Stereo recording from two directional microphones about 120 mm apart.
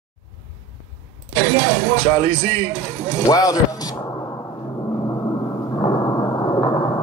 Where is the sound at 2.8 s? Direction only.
15° right (ahead or behind).